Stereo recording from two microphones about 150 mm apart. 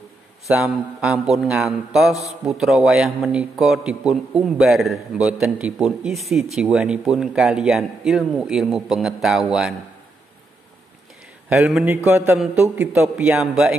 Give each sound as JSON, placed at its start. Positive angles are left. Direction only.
{"t": 0.5, "sound": "speech", "side_deg": -5}
{"t": 11.4, "sound": "speech", "side_deg": -10}
{"t": 13.4, "sound": "speech", "side_deg": -5}